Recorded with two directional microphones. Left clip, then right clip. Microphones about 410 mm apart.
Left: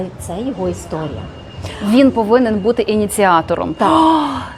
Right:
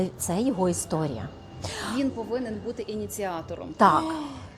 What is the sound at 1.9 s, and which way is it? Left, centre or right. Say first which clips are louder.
Speech: left 19 dB; left.